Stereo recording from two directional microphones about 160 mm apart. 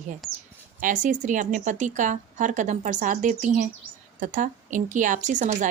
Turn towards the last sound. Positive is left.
turn(degrees=-50)  # may be behind; listen again after turning